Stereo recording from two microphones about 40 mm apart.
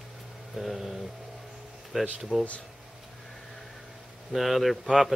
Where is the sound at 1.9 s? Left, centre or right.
Centre.